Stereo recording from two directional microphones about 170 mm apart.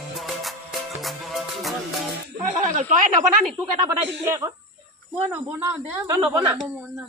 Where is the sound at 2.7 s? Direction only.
45° right (ahead or behind).